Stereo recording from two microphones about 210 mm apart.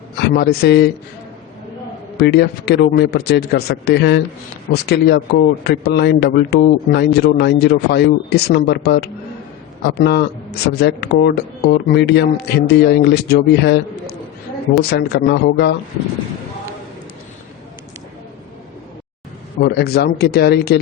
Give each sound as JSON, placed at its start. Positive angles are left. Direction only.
{"t": 0.2, "sound": "a man's voice", "side_deg": 50}
{"t": 2.1, "sound": "a man's voice", "side_deg": 50}
{"t": 19.5, "sound": "a man's voice", "side_deg": 50}